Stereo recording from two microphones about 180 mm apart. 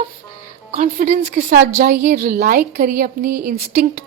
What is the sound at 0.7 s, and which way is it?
Speech, 45° right (ahead or behind).